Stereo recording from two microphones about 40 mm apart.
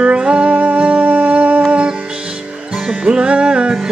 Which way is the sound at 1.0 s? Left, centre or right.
Right.